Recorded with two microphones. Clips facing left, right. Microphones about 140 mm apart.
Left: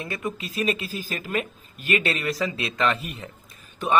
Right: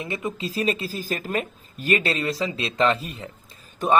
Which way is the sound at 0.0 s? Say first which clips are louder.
Right 2 dB; 20° right (ahead or behind).